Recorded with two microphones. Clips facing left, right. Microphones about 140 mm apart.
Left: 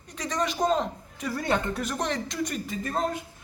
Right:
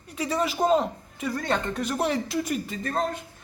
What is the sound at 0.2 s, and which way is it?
Speech, 5° right (ahead or behind).